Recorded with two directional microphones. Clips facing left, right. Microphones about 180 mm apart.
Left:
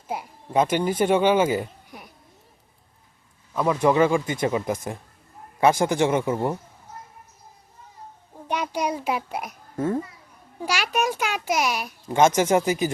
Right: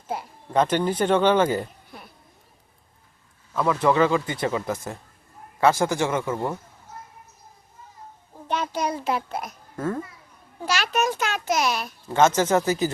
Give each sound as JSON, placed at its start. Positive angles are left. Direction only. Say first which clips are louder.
{"t": 0.1, "sound": "speech", "louder": "even", "side_deg": 10}
{"t": 3.5, "sound": "a child's voice", "louder": "left 1 dB", "side_deg": 15}
{"t": 8.4, "sound": "a child's voice", "louder": "even", "side_deg": 10}